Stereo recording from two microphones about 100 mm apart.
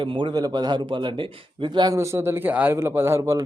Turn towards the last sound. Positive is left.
turn(degrees=-25)  # may be behind; listen again after turning